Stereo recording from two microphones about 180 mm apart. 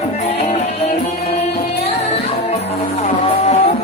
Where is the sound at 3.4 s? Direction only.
35° left (ahead or behind).